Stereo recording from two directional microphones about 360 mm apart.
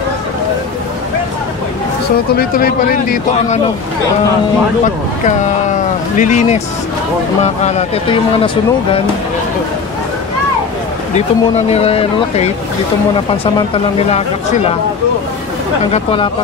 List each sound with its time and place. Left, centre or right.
2.3 s a man's voice: left
6.1 s a man's voice: centre
11.1 s speech: centre
15.9 s speech: centre